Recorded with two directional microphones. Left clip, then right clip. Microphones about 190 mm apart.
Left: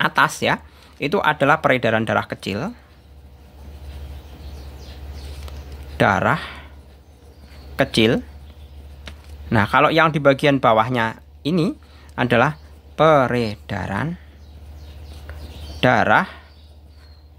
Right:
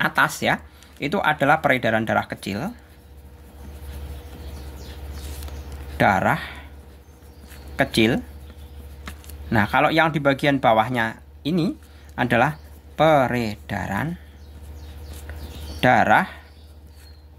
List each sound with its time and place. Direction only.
0.0 s speech: 25° left (ahead or behind)
5.9 s speech: 25° left (ahead or behind)
7.7 s speech: 25° left (ahead or behind)
9.5 s speech: 25° left (ahead or behind)
15.8 s speech: 25° left (ahead or behind)